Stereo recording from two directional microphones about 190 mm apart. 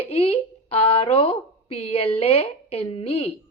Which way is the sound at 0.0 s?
30° left (ahead or behind).